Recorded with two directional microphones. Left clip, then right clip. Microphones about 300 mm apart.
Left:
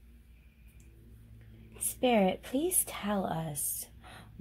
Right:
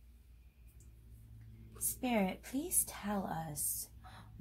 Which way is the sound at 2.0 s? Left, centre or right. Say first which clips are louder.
Left 9 dB; left.